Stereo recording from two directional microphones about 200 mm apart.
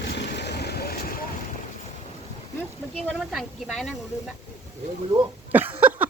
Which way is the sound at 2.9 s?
Centre (ahead or behind).